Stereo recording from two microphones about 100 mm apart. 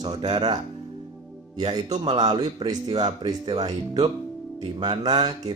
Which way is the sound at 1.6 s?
50° right (ahead or behind).